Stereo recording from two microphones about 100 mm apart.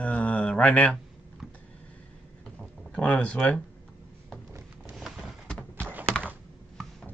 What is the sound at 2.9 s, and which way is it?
Speech, 10° left (ahead or behind).